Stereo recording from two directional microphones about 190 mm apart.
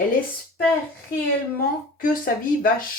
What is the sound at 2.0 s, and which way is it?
Speech, 45° left (ahead or behind).